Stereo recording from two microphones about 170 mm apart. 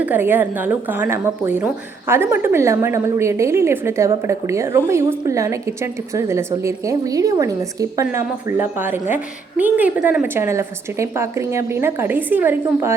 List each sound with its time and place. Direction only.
0.0 s a woman's voice: 10° right (ahead or behind)